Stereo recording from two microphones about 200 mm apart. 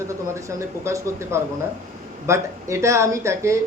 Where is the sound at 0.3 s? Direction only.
15° right (ahead or behind).